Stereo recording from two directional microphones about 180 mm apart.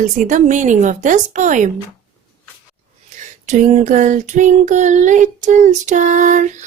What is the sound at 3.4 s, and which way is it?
Speech, 40° right (ahead or behind).